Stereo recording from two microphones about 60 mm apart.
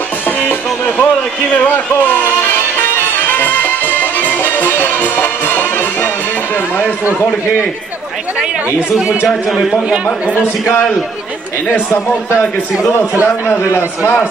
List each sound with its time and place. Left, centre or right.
0.4 s music: left
3.3 s music: left
8.9 s a man's voice: centre
12.3 s a man's voice: left